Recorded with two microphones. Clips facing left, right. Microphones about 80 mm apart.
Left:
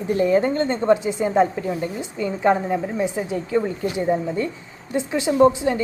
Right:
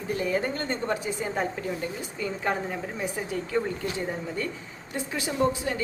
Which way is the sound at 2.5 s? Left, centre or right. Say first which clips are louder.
Left 12 dB; centre.